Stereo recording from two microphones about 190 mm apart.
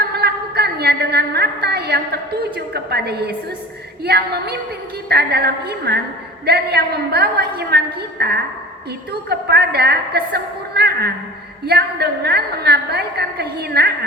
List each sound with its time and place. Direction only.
0.1 s a woman's voice: 60° right (ahead or behind)